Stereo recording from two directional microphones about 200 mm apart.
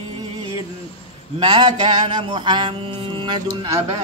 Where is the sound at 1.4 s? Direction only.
25° right (ahead or behind).